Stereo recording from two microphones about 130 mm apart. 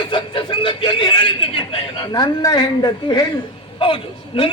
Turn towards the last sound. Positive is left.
turn(degrees=45)  # may be behind; listen again after turning